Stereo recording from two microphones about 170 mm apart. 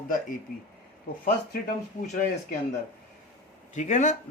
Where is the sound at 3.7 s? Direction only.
45° left (ahead or behind).